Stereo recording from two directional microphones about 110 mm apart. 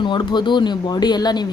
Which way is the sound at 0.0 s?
45° left (ahead or behind).